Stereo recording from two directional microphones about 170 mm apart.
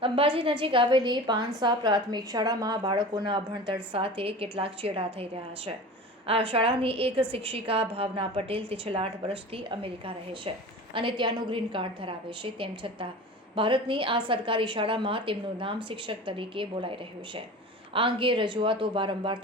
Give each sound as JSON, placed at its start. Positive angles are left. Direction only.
{"t": 0.0, "sound": "a woman's voice", "side_deg": -30}
{"t": 10.9, "sound": "a woman's voice", "side_deg": -30}